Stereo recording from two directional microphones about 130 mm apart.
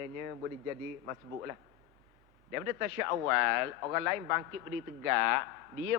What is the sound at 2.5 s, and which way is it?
A man's voice, 25° right (ahead or behind).